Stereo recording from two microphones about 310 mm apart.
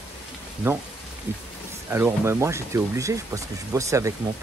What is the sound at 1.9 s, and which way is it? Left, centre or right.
Speech, centre.